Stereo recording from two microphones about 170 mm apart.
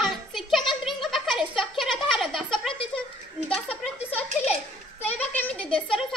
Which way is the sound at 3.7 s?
35° left (ahead or behind).